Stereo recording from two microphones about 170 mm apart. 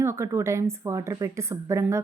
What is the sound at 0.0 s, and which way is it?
A woman's voice, 15° right (ahead or behind).